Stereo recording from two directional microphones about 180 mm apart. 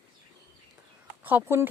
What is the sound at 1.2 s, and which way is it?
Speech, 10° right (ahead or behind).